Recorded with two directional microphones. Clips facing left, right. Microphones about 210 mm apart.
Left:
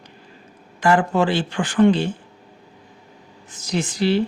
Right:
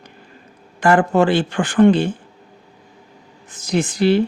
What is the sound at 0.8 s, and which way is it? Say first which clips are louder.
Speech: right 3 dB; 55° right (ahead or behind).